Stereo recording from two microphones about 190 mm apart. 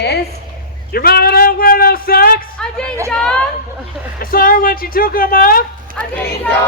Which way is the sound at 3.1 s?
5° left (ahead or behind).